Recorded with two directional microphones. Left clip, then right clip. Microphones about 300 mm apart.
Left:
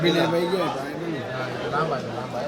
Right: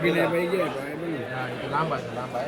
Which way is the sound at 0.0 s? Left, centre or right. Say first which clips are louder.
Left 2 dB; left.